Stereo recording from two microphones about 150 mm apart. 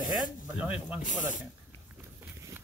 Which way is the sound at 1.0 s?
60° left (ahead or behind).